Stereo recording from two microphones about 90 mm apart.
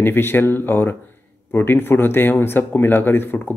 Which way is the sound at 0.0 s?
25° left (ahead or behind).